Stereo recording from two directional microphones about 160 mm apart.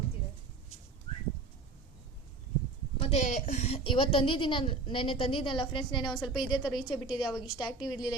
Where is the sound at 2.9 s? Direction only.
35° left (ahead or behind).